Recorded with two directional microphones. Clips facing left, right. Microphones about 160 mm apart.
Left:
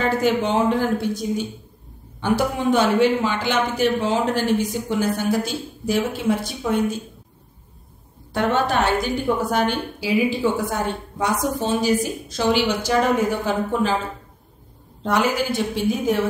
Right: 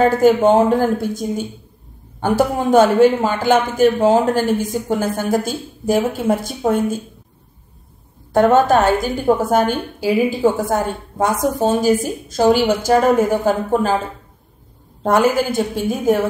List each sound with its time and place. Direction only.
0.0 s speech: 45° right (ahead or behind)
8.3 s speech: 45° right (ahead or behind)
15.0 s speech: 45° right (ahead or behind)